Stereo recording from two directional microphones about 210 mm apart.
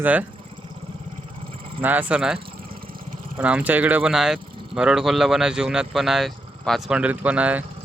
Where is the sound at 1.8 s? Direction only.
10° right (ahead or behind).